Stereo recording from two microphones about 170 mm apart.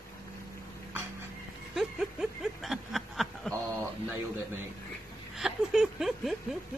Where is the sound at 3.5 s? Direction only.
15° right (ahead or behind).